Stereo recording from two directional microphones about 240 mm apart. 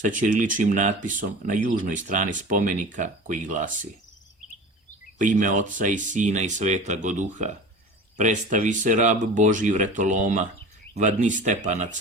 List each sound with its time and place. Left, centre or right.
0.0 s speech: right
5.1 s speech: right